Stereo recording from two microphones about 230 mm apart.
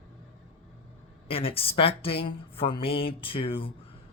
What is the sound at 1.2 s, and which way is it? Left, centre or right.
Speech, left.